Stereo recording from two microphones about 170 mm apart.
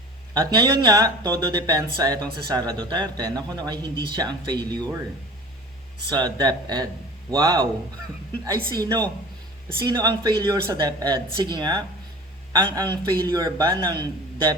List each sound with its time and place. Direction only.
0.3 s speech: 25° right (ahead or behind)
6.1 s speech: 25° right (ahead or behind)
8.7 s speech: 20° right (ahead or behind)
12.8 s speech: 10° left (ahead or behind)
13.1 s speech: 25° right (ahead or behind)